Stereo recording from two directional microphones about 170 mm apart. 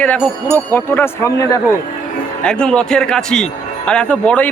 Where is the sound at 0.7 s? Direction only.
15° left (ahead or behind).